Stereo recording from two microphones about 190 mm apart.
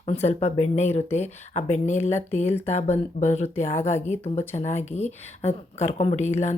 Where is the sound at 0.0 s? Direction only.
35° left (ahead or behind).